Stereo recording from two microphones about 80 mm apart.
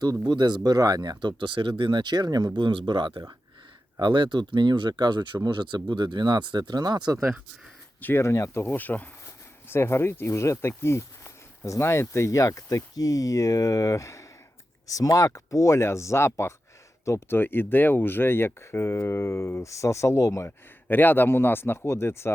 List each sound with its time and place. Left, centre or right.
0.3 s speech: right
1.4 s speech: right
2.6 s speech: right
8.0 s speech: left
20.8 s speech: left